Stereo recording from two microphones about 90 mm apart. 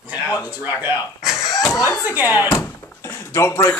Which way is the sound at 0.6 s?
20° right (ahead or behind).